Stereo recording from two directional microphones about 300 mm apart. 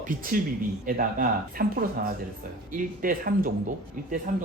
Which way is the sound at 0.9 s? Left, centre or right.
Right.